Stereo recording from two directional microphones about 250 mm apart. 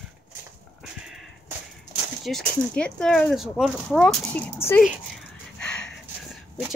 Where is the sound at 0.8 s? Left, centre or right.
Centre.